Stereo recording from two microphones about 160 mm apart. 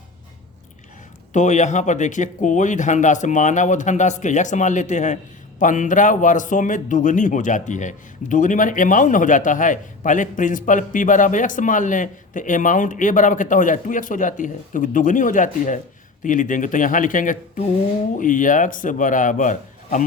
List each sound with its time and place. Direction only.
1.3 s speech: 50° left (ahead or behind)